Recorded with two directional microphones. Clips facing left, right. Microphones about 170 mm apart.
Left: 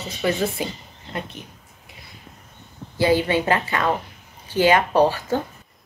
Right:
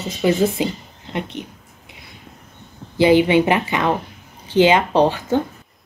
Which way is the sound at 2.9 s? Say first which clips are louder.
Right 6 dB; 20° right (ahead or behind).